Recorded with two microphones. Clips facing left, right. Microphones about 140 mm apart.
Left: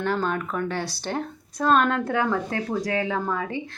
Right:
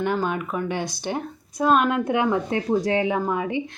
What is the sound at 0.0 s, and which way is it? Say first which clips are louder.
Speech: right 1 dB; 15° right (ahead or behind).